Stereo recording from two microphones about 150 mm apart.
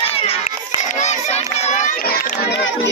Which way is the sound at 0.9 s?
50° left (ahead or behind).